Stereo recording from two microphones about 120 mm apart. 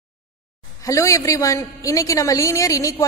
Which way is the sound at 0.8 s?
25° left (ahead or behind).